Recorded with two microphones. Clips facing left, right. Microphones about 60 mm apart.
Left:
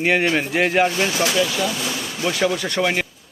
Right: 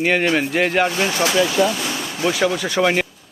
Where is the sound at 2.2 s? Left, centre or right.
Centre.